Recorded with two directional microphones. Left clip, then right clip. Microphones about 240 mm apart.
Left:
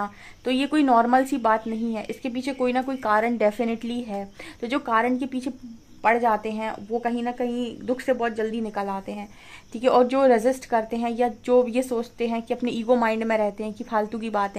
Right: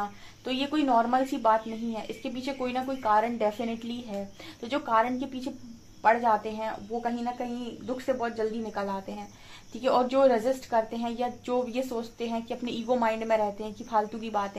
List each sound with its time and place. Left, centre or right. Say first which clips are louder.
0.0 s a woman's voice: left 5 dB; left